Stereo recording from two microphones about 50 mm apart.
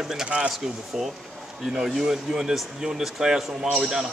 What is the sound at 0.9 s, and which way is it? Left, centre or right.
A man's voice, centre.